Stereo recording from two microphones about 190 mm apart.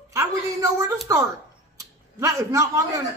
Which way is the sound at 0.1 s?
15° right (ahead or behind).